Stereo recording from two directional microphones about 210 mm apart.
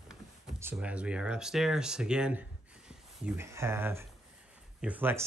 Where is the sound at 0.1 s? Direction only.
5° right (ahead or behind).